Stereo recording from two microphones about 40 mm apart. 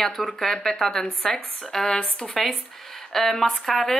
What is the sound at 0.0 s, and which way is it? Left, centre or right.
Speech, centre.